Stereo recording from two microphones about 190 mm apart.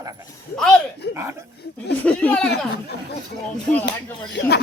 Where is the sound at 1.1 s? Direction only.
15° right (ahead or behind).